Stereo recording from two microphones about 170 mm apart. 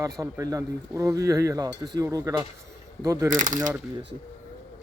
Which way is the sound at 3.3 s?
50° right (ahead or behind).